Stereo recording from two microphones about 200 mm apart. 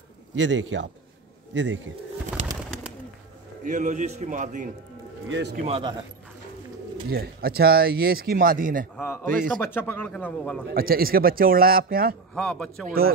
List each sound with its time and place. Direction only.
0.4 s speech: 65° right (ahead or behind)
3.6 s a man's voice: 40° right (ahead or behind)
5.3 s speech: 55° right (ahead or behind)
5.7 s speech: 20° right (ahead or behind)
7.1 s speech: 50° right (ahead or behind)
8.9 s speech: 10° left (ahead or behind)
9.2 s speech: 45° right (ahead or behind)
9.6 s speech: 10° left (ahead or behind)
10.7 s speech: 45° right (ahead or behind)
12.4 s a man's voice: 5° left (ahead or behind)
12.8 s speech: 50° right (ahead or behind)